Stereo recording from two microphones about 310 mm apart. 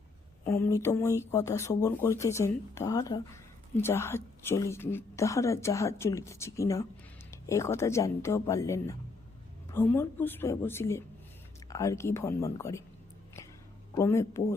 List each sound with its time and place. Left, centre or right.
0.4 s a woman's voice: centre
13.9 s a woman's voice: centre